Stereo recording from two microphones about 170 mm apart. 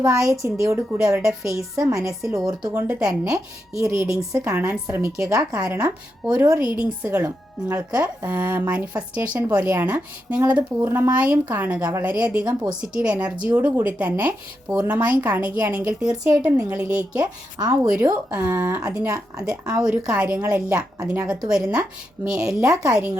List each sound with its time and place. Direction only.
0.0 s speech: 20° right (ahead or behind)
0.9 s speech: 5° right (ahead or behind)
1.4 s a woman's voice: 20° right (ahead or behind)
2.8 s speech: 5° right (ahead or behind)
5.5 s speech: 10° right (ahead or behind)
19.0 s speech: 20° right (ahead or behind)
19.7 s speech: 5° right (ahead or behind)
22.6 s a woman's voice: 20° right (ahead or behind)